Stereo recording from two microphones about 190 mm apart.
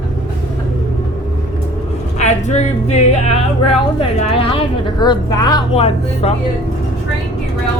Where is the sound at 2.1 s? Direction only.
35° left (ahead or behind).